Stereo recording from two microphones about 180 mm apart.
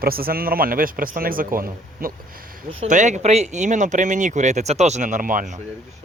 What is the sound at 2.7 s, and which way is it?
Speech, 40° right (ahead or behind).